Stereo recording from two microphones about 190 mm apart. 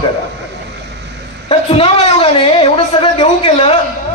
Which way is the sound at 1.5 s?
30° left (ahead or behind).